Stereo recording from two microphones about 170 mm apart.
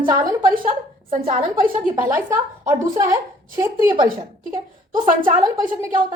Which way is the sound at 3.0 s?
25° right (ahead or behind).